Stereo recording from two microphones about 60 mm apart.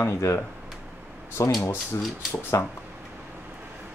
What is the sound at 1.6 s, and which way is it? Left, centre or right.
Speech, left.